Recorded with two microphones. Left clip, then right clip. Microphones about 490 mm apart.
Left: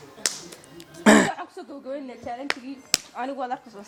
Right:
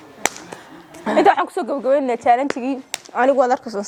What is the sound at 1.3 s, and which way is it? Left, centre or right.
Speech, right.